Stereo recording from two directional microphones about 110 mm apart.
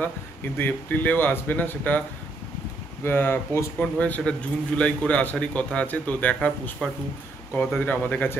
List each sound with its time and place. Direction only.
0.6 s a man's voice: 15° left (ahead or behind)
3.8 s a man's voice: 10° left (ahead or behind)